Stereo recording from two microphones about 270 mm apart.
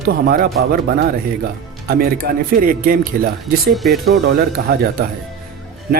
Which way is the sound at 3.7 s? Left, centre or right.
Centre.